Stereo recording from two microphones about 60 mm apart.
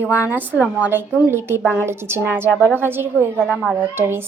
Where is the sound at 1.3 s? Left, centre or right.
Right.